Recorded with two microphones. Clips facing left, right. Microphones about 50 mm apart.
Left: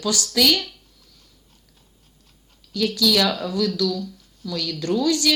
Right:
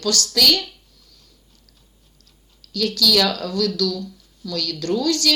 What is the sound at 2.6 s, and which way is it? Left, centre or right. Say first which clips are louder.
A woman's voice: even; centre.